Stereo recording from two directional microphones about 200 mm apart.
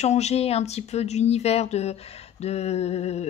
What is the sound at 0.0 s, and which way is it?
Speech, 35° left (ahead or behind).